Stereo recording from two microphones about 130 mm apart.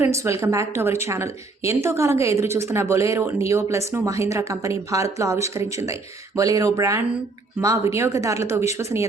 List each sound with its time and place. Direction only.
0.0 s speech: 20° right (ahead or behind)